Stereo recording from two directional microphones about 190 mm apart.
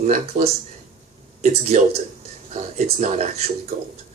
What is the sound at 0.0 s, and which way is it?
Speech, 40° right (ahead or behind).